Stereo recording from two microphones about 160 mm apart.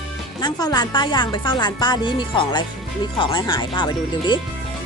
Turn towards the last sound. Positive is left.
turn(degrees=30)  # may be behind; listen again after turning